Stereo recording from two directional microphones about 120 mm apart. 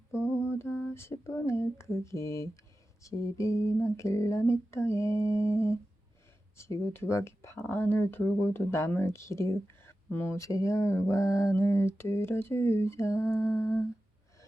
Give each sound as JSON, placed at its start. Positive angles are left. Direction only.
{"t": 0.1, "sound": "lullaby", "side_deg": 25}
{"t": 3.0, "sound": "speech", "side_deg": 25}